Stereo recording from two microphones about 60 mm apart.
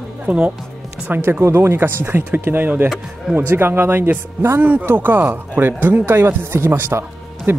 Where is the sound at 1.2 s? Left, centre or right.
Right.